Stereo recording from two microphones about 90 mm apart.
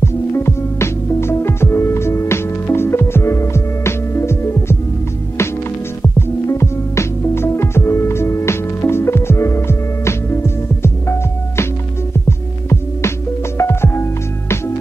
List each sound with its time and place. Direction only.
0.0 s music: 30° left (ahead or behind)
6.0 s music: 30° left (ahead or behind)